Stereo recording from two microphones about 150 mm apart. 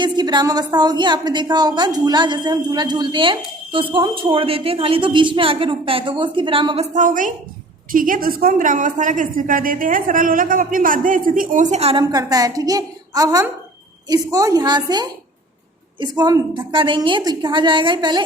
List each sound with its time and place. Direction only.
0.0 s a woman's voice: 30° right (ahead or behind)
6.9 s a woman's voice: 60° right (ahead or behind); by 12.0 s 40° right (ahead or behind)
12.1 s a woman's voice: 25° right (ahead or behind)